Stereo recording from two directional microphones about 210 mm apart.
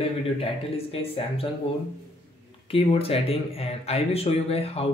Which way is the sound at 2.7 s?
25° left (ahead or behind).